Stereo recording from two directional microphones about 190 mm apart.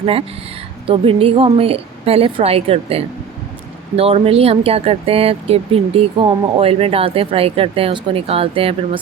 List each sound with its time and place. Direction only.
0.0 s speech: 30° right (ahead or behind)